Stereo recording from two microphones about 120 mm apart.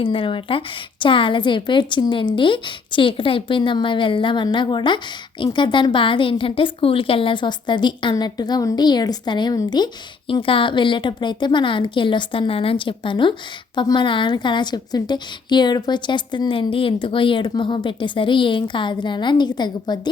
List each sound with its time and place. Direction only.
0.0 s a woman's voice: 50° left (ahead or behind)